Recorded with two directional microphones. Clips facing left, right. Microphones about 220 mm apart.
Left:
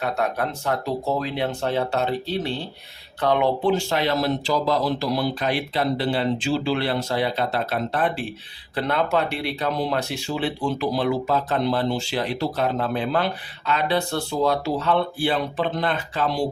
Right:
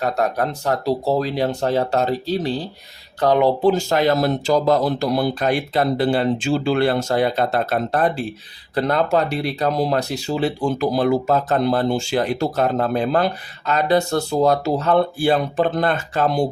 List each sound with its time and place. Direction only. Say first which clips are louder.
0.0 s speech: right 4 dB; 40° right (ahead or behind)